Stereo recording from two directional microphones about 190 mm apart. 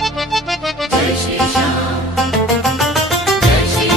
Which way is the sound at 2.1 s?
Centre (ahead or behind).